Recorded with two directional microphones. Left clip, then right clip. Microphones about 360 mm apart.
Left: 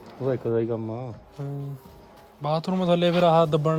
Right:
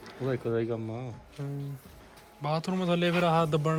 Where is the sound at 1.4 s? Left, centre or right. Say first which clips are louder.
Left 4 dB; centre.